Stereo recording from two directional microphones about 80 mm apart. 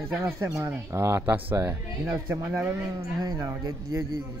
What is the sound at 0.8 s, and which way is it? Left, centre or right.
Speech, right.